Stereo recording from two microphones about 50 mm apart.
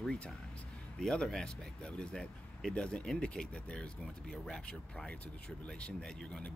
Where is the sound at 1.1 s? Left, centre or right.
Centre.